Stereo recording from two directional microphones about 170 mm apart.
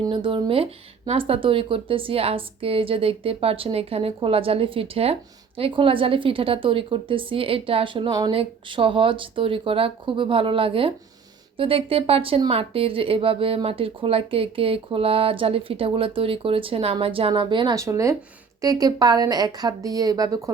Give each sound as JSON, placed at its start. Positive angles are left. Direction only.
{"t": 0.0, "sound": "a woman's voice", "side_deg": -30}